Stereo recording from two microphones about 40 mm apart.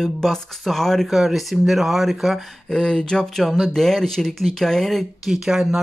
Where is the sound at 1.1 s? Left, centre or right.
Centre.